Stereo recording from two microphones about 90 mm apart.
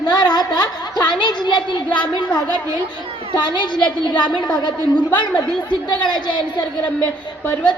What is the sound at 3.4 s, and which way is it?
A woman's voice, 55° left (ahead or behind).